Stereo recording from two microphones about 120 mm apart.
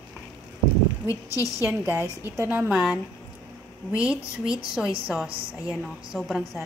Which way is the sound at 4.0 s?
5° right (ahead or behind).